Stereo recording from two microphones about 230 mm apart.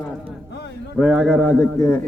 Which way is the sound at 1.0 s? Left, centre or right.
Centre.